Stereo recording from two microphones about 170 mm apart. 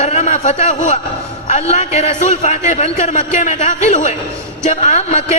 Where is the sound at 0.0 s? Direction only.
40° left (ahead or behind).